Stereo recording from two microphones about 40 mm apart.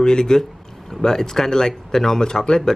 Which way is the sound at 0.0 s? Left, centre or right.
Centre.